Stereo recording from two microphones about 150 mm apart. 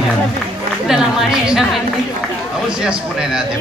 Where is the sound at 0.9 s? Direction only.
5° right (ahead or behind).